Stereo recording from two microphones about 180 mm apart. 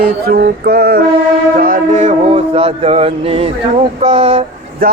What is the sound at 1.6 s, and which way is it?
Music, 50° right (ahead or behind).